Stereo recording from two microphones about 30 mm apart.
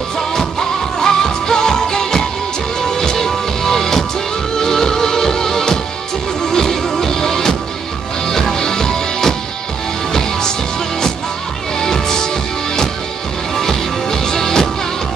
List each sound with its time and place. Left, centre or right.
0.3 s music: centre
11.8 s music: centre
13.6 s music: centre